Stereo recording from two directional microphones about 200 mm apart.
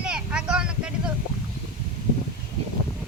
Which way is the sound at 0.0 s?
5° right (ahead or behind).